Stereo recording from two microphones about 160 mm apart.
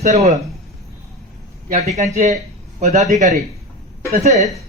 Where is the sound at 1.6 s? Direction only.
60° right (ahead or behind).